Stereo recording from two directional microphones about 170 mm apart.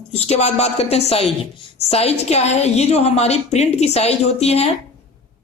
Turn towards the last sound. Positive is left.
turn(degrees=35)  # may be behind; listen again after turning